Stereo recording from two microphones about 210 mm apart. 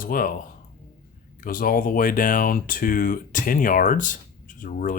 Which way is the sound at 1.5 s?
40° left (ahead or behind).